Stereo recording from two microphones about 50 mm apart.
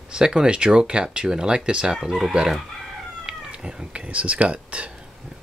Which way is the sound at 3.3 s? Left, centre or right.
Centre.